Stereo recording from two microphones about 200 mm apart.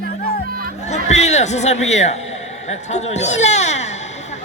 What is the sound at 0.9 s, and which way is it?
A woman's voice, 35° left (ahead or behind).